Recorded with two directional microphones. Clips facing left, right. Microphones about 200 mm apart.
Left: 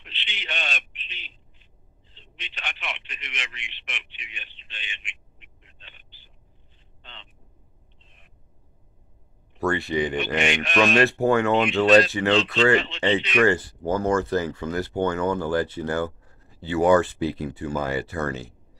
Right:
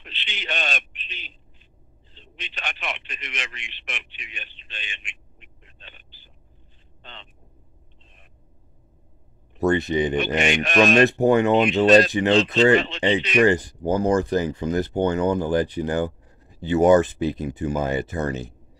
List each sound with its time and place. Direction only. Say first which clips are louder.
0.0 s a sound: right 3 dB; 40° right (ahead or behind)
2.1 s a man's voice: right 4 dB; 40° right (ahead or behind)
7.0 s a sound: right 4 dB; 45° right (ahead or behind)
9.6 s speech: right 4 dB; 20° right (ahead or behind)
10.1 s a man's voice: right 3 dB; 40° right (ahead or behind)
11.0 s speech: right 3 dB; 20° right (ahead or behind)
11.8 s a man's voice: right 1 dB; 40° right (ahead or behind)
13.4 s speech: right 4 dB; 15° right (ahead or behind)